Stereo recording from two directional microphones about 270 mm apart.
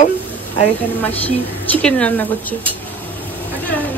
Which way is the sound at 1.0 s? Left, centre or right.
Centre.